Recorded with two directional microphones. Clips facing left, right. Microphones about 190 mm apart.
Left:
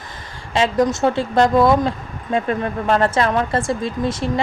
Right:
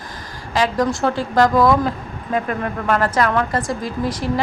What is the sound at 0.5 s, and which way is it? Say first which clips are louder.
Speech: left 2 dB; 25° left (ahead or behind).